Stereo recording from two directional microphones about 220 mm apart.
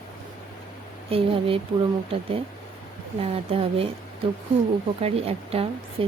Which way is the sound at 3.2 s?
25° right (ahead or behind).